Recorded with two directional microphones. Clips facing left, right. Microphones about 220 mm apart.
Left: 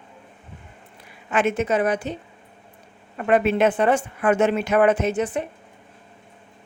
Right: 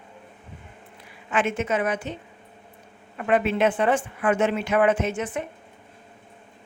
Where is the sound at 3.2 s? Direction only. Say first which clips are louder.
Left 3 dB; 45° left (ahead or behind).